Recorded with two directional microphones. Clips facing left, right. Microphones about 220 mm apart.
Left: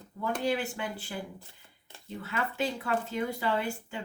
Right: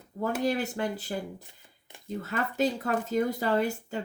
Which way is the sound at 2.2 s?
40° right (ahead or behind).